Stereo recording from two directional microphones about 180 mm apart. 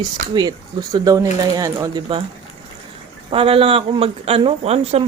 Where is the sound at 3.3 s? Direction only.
30° right (ahead or behind).